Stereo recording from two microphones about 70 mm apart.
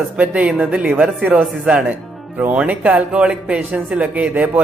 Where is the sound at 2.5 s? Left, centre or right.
Centre.